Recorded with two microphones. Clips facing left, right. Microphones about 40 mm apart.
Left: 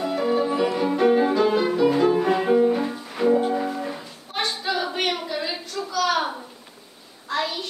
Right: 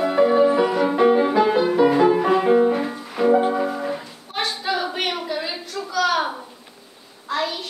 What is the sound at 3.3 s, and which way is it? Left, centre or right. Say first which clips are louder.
Music: right 3 dB; right.